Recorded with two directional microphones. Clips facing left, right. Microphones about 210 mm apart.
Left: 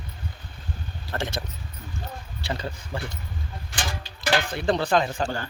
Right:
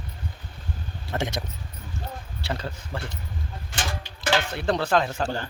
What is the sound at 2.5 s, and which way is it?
Speech, centre (ahead or behind).